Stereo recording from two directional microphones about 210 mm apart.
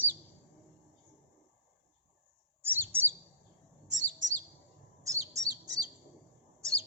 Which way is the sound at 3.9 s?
35° right (ahead or behind).